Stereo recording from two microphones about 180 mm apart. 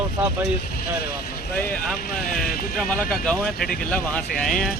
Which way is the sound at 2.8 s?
5° left (ahead or behind).